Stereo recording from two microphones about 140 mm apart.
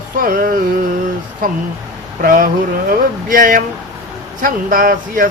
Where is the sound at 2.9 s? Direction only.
85° right.